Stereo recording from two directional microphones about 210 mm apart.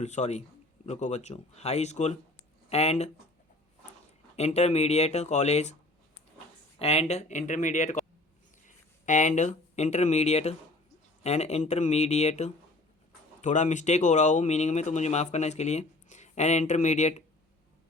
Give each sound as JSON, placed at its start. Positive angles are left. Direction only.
{"t": 0.0, "sound": "speech", "side_deg": 35}
{"t": 4.4, "sound": "speech", "side_deg": 30}
{"t": 6.7, "sound": "speech", "side_deg": 30}